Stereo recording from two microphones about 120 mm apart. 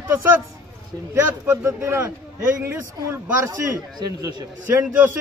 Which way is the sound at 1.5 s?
20° right (ahead or behind).